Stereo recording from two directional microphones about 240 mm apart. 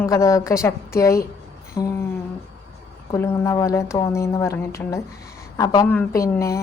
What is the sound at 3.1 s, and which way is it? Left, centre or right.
A woman's voice, centre.